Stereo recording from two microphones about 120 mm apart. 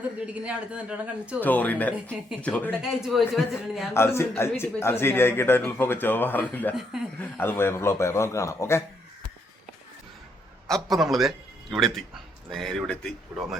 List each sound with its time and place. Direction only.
0.3 s a man's voice: 10° right (ahead or behind)
1.4 s speech: 15° left (ahead or behind)
2.8 s speech: 5° right (ahead or behind)
3.9 s speech: 20° left (ahead or behind)
10.7 s speech: centre (ahead or behind)